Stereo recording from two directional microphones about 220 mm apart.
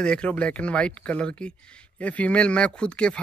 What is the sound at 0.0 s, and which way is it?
Speech, 5° left (ahead or behind).